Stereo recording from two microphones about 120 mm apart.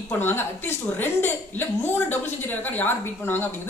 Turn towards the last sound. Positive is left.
turn(degrees=15)  # may be behind; listen again after turning